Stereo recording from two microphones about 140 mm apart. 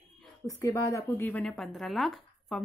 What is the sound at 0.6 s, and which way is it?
Speech, 20° left (ahead or behind).